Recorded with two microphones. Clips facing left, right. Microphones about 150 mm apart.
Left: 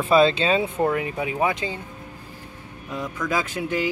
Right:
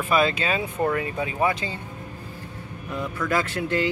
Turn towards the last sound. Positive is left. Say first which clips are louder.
# right 1 dB
turn(degrees=10)  # may be behind; listen again after turning